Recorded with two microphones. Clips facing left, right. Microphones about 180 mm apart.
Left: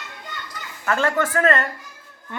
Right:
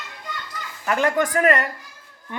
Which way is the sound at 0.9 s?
15° right (ahead or behind).